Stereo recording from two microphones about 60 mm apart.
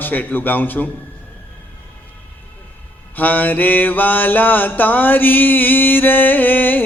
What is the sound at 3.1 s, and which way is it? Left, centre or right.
Mantra, left.